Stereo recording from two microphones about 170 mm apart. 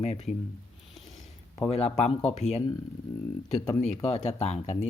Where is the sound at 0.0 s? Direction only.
35° left (ahead or behind).